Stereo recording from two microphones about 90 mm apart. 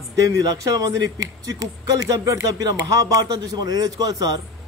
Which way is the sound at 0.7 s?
45° right (ahead or behind).